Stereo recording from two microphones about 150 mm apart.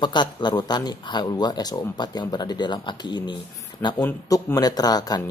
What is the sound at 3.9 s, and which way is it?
Speech, 20° left (ahead or behind).